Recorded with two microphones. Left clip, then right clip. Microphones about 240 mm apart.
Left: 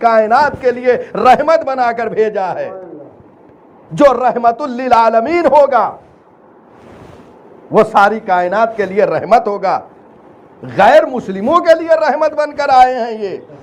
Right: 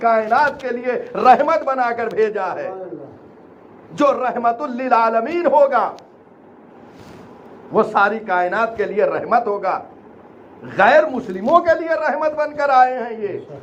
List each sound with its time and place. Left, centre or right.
0.0 s a man's voice: left
3.9 s a man's voice: left
7.7 s a man's voice: left